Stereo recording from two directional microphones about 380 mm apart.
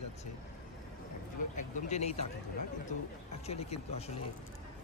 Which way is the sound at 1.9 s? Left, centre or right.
Centre.